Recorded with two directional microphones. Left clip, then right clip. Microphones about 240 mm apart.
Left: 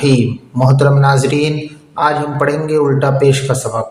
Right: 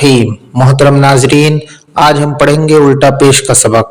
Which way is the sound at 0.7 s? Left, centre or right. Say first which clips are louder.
Right 7 dB; right.